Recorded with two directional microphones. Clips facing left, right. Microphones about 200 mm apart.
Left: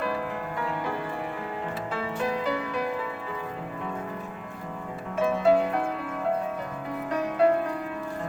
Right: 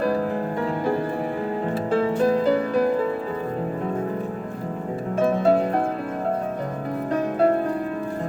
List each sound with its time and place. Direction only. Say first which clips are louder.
1.9 s music: right 11 dB; 40° right (ahead or behind)
5.2 s music: right 2 dB; 40° right (ahead or behind)
7.1 s music: right 2 dB; 45° right (ahead or behind)